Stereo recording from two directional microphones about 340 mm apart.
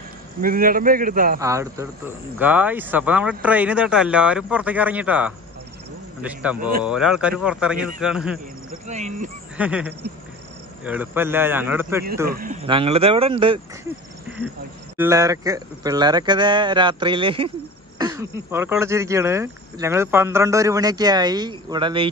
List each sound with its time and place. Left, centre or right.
0.4 s a man's voice: right
1.4 s speech: centre
8.8 s a man's voice: centre
9.6 s speech: centre
12.3 s speech: right
15.0 s speech: centre